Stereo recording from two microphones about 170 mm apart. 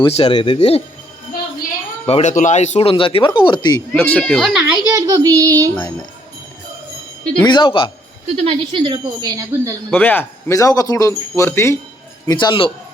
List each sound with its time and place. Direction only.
0.0 s speech: 30° left (ahead or behind)
2.0 s speech: 40° left (ahead or behind); by 3.8 s 25° left (ahead or behind)
3.9 s speech: 5° left (ahead or behind)
4.9 s child singing: 20° right (ahead or behind)
7.4 s speech: 25° left (ahead or behind)
8.4 s speech: 30° right (ahead or behind)
9.9 s speech: 10° left (ahead or behind); by 12.7 s 30° left (ahead or behind)